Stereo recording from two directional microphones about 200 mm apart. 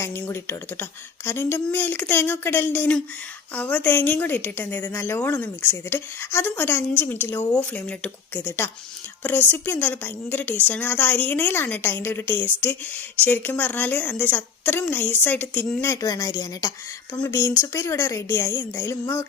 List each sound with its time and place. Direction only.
0.0 s a woman's voice: 15° left (ahead or behind)